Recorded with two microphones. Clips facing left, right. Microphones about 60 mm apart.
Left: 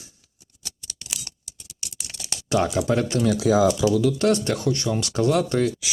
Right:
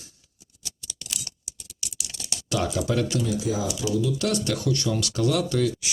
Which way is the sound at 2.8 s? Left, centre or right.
Left.